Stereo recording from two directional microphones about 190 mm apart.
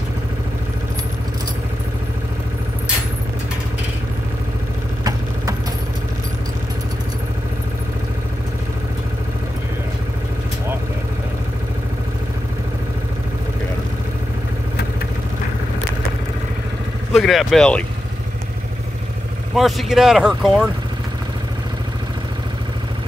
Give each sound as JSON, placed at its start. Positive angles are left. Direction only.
{"t": 17.1, "sound": "speech", "side_deg": 0}
{"t": 19.5, "sound": "speech", "side_deg": 0}